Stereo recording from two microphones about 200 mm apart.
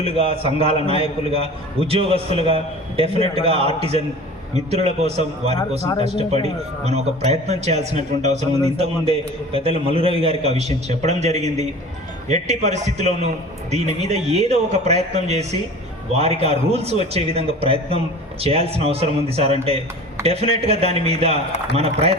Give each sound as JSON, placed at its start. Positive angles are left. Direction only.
{"t": 0.0, "sound": "a man's voice", "side_deg": -30}
{"t": 5.8, "sound": "speech", "side_deg": 20}
{"t": 6.1, "sound": "a man's voice", "side_deg": -30}